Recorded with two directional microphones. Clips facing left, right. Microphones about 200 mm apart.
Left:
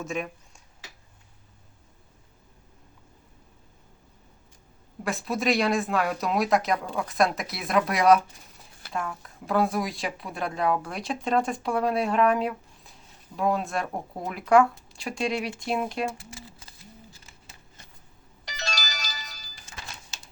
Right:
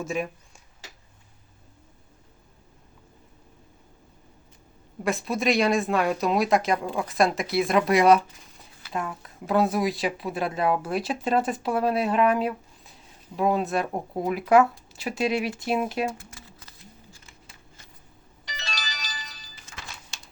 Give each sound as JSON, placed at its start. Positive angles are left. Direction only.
{"t": 0.0, "sound": "speech", "side_deg": 0}
{"t": 5.0, "sound": "speech", "side_deg": 0}
{"t": 18.4, "sound": "ringtone", "side_deg": 40}